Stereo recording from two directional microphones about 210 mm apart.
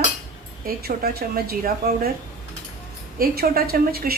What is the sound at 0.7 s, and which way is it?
A woman's voice, 45° right (ahead or behind).